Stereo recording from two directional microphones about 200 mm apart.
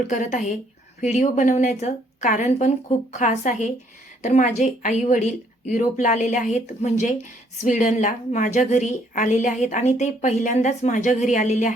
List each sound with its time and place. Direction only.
0.1 s speech: 40° left (ahead or behind)